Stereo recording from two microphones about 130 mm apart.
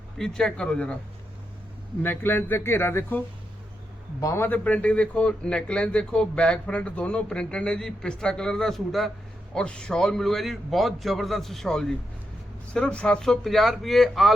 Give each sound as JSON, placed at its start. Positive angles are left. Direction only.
{"t": 0.2, "sound": "speech", "side_deg": 5}
{"t": 2.0, "sound": "a man's voice", "side_deg": 15}